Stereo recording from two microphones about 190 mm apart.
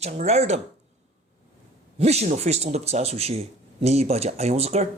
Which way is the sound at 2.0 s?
35° right (ahead or behind).